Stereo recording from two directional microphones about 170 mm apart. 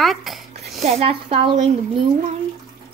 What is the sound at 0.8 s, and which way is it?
Speech, 35° right (ahead or behind).